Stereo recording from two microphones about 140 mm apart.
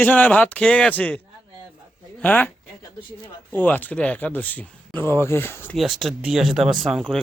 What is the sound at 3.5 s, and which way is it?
Speech, 10° left (ahead or behind).